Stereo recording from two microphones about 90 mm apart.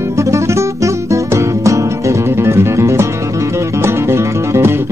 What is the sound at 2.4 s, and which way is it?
Music, 30° right (ahead or behind).